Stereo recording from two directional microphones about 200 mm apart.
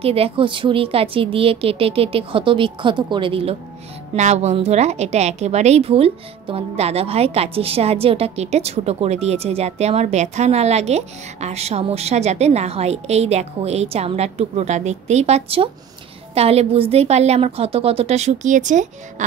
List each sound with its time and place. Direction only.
0.0 s a woman's voice: 30° right (ahead or behind)